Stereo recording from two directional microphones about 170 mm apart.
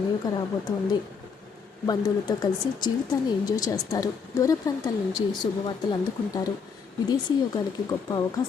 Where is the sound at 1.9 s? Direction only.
25° left (ahead or behind).